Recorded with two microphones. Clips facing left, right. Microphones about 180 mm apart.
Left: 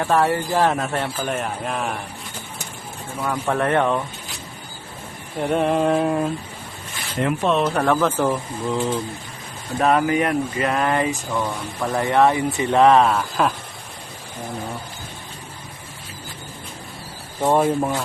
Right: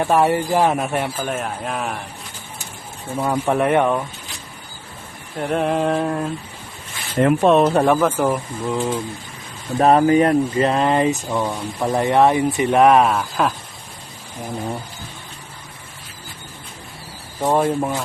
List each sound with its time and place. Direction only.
0.0 s speech: 20° right (ahead or behind); by 2.0 s centre (ahead or behind)
3.2 s speech: 20° right (ahead or behind)
5.4 s mantra: centre (ahead or behind)
7.2 s speech: 50° right (ahead or behind)
7.6 s speech: 30° right (ahead or behind)
7.9 s speech: 10° right (ahead or behind)
9.8 s speech: 35° right (ahead or behind); by 13.5 s 5° right (ahead or behind)
17.4 s mantra: 5° left (ahead or behind)